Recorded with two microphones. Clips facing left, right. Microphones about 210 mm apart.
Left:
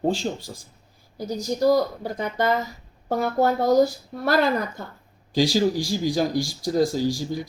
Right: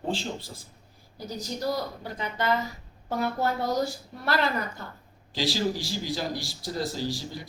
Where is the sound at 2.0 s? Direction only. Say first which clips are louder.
Left 5 dB; 45° left (ahead or behind).